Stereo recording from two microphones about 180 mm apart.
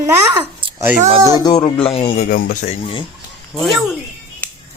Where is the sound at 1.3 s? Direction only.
20° left (ahead or behind).